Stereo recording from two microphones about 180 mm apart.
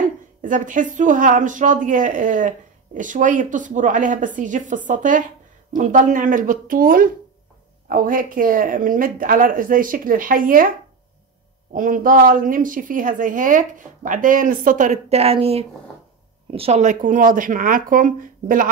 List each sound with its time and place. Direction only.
0.0 s a woman's voice: 45° right (ahead or behind)
11.7 s a woman's voice: 50° right (ahead or behind)